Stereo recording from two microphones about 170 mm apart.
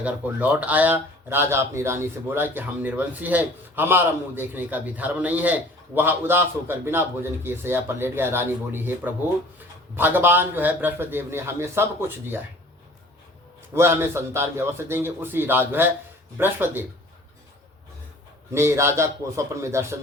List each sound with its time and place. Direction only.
0.0 s speech: 10° right (ahead or behind)
13.7 s speech: 15° right (ahead or behind)
18.5 s speech: 15° right (ahead or behind)